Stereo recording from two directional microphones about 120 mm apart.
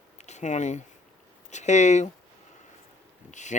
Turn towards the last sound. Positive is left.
turn(degrees=85)